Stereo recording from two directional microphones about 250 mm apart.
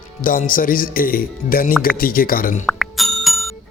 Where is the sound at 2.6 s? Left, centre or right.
Centre.